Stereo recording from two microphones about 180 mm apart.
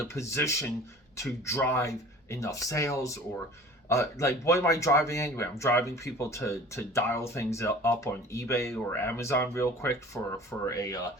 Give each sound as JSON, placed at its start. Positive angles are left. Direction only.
{"t": 0.0, "sound": "speech", "side_deg": 15}